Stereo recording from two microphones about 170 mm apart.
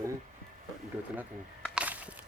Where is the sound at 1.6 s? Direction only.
10° right (ahead or behind).